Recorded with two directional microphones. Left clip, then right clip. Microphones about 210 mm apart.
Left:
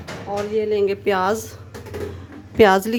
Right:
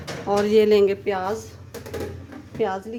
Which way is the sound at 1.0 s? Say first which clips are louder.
Left 6 dB; 30° left (ahead or behind).